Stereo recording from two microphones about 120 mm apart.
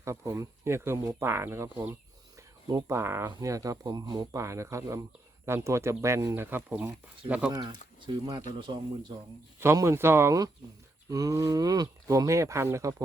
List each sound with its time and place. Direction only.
0.0 s speech: 25° right (ahead or behind)
7.5 s speech: 40° right (ahead or behind)
9.6 s speech: 20° right (ahead or behind)